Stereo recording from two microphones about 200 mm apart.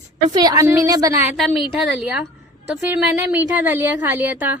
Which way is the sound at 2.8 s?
10° right (ahead or behind).